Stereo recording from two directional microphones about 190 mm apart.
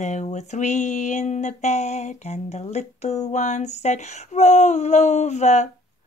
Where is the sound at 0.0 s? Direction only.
40° left (ahead or behind).